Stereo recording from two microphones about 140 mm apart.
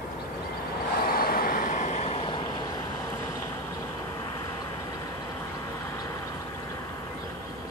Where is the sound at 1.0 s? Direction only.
90° left; by 2.4 s 45° left (ahead or behind).